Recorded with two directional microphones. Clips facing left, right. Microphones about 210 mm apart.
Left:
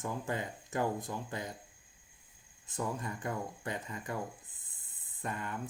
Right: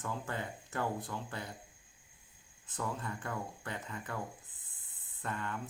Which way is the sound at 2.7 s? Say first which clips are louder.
Left 2 dB; 15° left (ahead or behind).